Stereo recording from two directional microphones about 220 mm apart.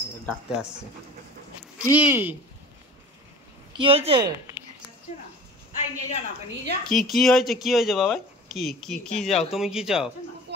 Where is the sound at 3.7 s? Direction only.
25° right (ahead or behind).